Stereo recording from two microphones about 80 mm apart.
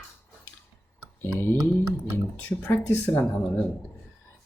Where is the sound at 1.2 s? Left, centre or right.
Left.